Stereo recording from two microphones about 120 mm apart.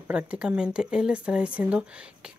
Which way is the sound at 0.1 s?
10° right (ahead or behind).